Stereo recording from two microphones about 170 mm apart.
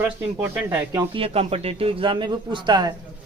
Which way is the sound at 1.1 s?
35° right (ahead or behind).